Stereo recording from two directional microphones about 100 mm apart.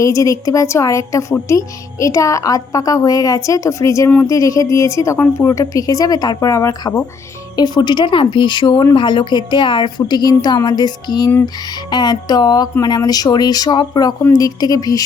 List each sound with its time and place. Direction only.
0.0 s speech: 35° left (ahead or behind)
7.5 s speech: 45° left (ahead or behind)